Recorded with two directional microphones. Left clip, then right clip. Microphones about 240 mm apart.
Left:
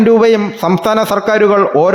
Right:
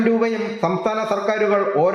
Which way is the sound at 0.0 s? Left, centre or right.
Left.